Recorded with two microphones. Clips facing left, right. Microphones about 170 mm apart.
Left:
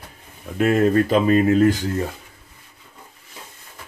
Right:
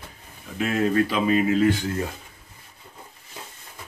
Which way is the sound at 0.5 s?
50° left (ahead or behind).